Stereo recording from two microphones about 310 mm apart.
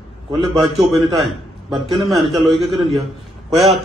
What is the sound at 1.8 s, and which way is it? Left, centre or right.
Speech, centre.